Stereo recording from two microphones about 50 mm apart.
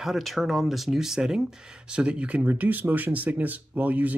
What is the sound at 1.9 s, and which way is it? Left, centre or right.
Speech, right.